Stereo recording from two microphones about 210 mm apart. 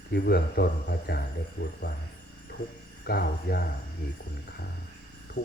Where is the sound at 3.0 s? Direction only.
50° left (ahead or behind).